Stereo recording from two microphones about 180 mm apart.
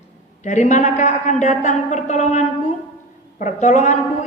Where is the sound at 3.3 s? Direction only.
45° left (ahead or behind).